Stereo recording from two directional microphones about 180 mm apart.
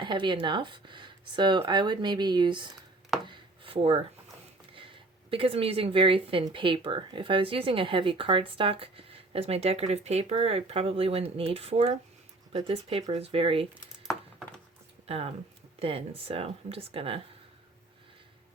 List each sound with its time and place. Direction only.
0.0 s speech: 25° right (ahead or behind)
3.2 s a sound: 30° right (ahead or behind)
4.7 s speech: 30° right (ahead or behind)
15.0 s speech: 35° right (ahead or behind)